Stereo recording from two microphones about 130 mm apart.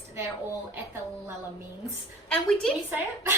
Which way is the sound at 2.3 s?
5° left (ahead or behind).